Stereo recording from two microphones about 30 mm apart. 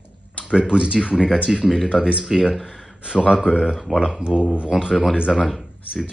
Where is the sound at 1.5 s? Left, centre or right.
Centre.